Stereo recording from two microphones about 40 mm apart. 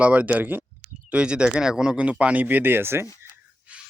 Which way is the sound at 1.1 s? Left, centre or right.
Right.